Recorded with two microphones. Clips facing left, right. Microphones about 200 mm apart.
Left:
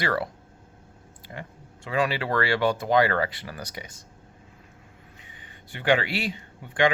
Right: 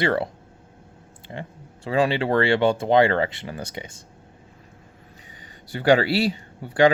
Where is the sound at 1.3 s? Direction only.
30° right (ahead or behind).